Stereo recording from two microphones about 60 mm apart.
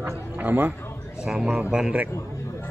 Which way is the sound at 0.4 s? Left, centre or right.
Right.